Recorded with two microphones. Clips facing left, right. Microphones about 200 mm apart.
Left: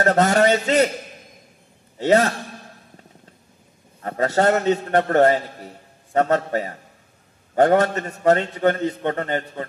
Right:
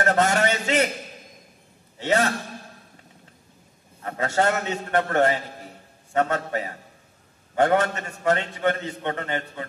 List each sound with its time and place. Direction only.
0.0 s a man's voice: 40° left (ahead or behind)
2.0 s a man's voice: 35° left (ahead or behind)
4.0 s a man's voice: 40° left (ahead or behind)